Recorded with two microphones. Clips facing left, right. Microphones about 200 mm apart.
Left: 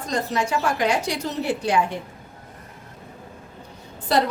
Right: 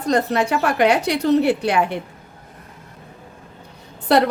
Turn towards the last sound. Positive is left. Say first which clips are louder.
# right 5 dB
turn(degrees=-65)  # may be behind; listen again after turning